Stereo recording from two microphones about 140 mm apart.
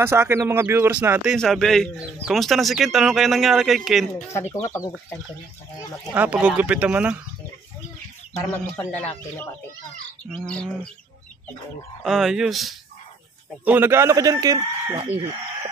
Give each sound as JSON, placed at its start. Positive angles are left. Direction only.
{"t": 0.0, "sound": "speech", "side_deg": -20}
{"t": 1.4, "sound": "speech", "side_deg": 5}
{"t": 4.3, "sound": "speech", "side_deg": 20}
{"t": 6.1, "sound": "speech", "side_deg": -10}
{"t": 8.5, "sound": "speech", "side_deg": 15}
{"t": 12.0, "sound": "speech", "side_deg": 0}
{"t": 13.7, "sound": "a man's voice", "side_deg": -15}